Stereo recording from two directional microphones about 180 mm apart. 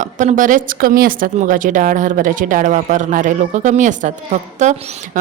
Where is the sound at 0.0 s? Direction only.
45° right (ahead or behind).